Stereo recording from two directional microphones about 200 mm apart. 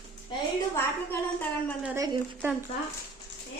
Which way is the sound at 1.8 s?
10° right (ahead or behind).